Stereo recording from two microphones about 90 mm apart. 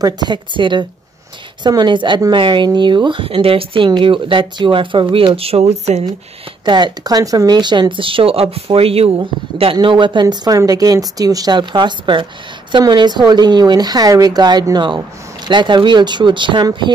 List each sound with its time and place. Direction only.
0.0 s speech: 55° right (ahead or behind); by 3.9 s 85° right
3.9 s speech: 70° right (ahead or behind); by 5.6 s 90° right
6.6 s speech: 55° right (ahead or behind)
10.3 s speech: 50° right (ahead or behind)